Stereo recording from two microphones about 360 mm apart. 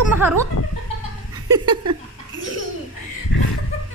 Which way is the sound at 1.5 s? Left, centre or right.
Centre.